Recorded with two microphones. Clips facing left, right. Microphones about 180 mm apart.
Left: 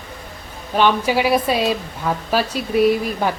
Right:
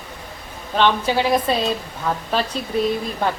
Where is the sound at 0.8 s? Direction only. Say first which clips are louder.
Left 2 dB; 10° left (ahead or behind).